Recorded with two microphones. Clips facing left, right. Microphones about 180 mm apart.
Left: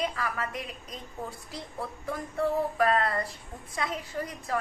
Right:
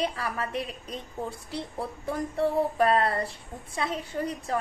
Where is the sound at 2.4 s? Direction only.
30° right (ahead or behind).